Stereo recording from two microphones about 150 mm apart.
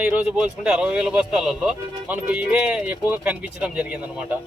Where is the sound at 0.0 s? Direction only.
5° right (ahead or behind).